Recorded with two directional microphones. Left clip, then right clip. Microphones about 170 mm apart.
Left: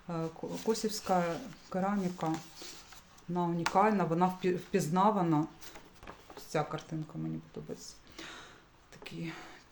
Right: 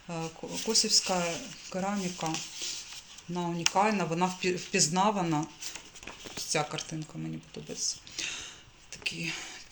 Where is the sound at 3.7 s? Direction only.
20° left (ahead or behind).